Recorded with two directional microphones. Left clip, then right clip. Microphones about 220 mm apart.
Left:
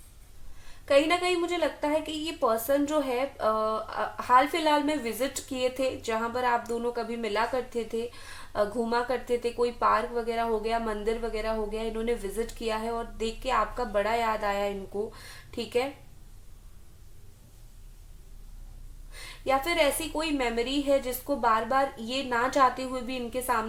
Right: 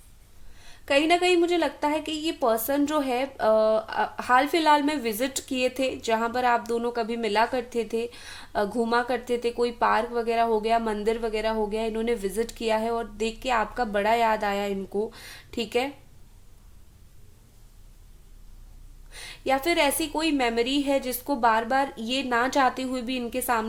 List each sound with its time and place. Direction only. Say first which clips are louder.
0.6 s a woman's voice: even; 50° right (ahead or behind)
19.1 s a woman's voice: right 1 dB; 50° right (ahead or behind)